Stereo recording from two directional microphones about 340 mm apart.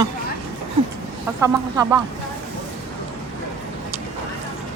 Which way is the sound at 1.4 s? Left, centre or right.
Centre.